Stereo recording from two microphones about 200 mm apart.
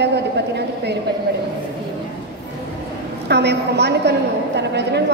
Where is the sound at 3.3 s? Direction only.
55° right (ahead or behind).